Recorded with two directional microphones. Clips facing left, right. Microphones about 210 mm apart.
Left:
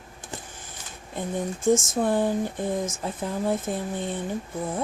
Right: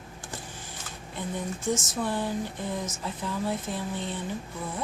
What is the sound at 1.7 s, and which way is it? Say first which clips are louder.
A woman's voice: left 7 dB; 50° left (ahead or behind).